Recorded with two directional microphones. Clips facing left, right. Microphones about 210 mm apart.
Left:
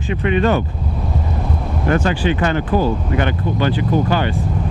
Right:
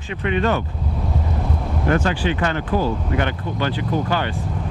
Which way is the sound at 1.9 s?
10° left (ahead or behind).